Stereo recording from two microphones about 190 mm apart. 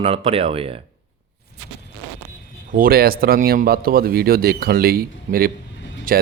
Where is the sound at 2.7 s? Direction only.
50° right (ahead or behind).